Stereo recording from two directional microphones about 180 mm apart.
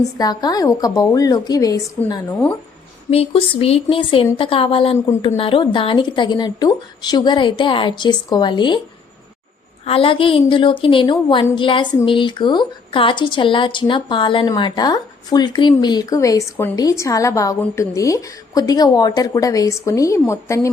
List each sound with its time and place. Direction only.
0.2 s a woman's voice: 20° left (ahead or behind)
3.1 s a woman's voice: 35° left (ahead or behind)
9.8 s a woman's voice: 30° left (ahead or behind)